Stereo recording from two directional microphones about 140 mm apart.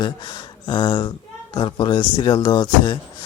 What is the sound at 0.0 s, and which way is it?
Speech, 30° left (ahead or behind).